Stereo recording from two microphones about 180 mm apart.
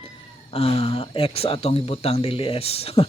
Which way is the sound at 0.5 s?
35° left (ahead or behind).